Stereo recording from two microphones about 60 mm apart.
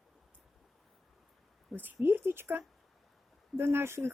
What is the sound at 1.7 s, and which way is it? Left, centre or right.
Speech, right.